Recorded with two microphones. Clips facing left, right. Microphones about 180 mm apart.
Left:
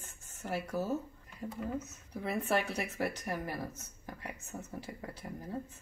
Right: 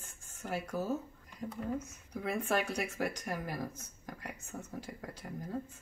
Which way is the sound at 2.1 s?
5° left (ahead or behind).